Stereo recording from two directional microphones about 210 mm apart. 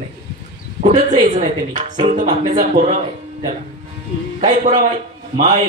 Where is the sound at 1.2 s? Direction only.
35° right (ahead or behind).